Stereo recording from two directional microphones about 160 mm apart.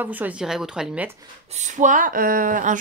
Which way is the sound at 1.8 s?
55° right (ahead or behind).